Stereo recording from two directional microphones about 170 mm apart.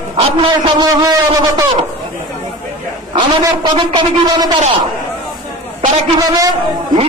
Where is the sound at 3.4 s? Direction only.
25° right (ahead or behind).